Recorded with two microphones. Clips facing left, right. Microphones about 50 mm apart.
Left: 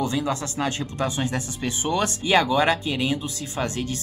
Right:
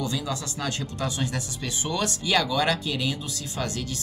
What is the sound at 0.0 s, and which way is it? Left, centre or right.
Speech, left.